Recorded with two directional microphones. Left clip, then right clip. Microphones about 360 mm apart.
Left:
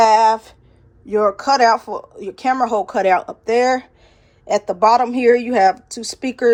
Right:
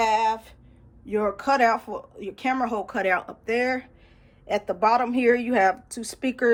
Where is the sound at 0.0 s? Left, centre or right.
Centre.